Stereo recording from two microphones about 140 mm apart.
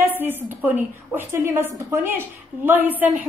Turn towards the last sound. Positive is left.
turn(degrees=-10)  # may be behind; listen again after turning